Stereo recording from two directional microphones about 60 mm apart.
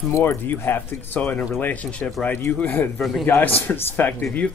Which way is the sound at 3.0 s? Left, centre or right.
Centre.